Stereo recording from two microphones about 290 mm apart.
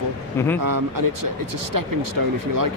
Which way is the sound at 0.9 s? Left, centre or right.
Right.